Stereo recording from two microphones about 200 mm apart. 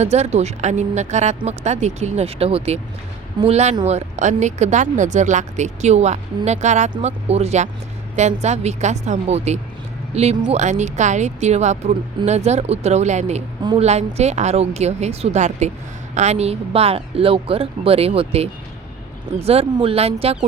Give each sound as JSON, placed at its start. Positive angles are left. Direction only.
{"t": 0.0, "sound": "a woman's voice", "side_deg": -35}